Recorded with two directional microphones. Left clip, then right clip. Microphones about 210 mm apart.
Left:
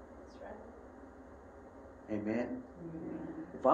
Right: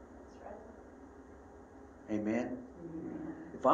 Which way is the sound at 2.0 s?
35° right (ahead or behind).